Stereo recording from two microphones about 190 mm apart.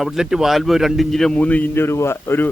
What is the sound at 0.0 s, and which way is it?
A man's voice, centre (ahead or behind).